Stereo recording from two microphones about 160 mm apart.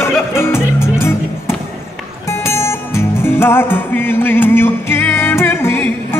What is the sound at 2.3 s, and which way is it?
Music, 15° left (ahead or behind).